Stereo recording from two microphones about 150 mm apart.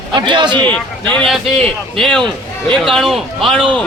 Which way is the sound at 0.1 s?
30° right (ahead or behind).